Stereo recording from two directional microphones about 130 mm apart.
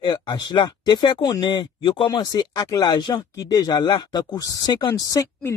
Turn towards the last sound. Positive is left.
turn(degrees=25)  # may be behind; listen again after turning